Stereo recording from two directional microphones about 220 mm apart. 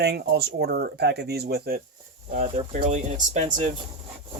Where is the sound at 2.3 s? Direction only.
30° right (ahead or behind).